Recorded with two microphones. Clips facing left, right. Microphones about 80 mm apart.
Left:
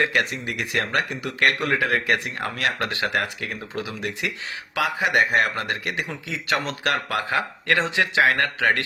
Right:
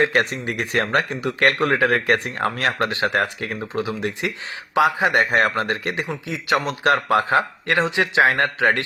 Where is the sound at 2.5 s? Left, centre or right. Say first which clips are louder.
Right 3 dB; right.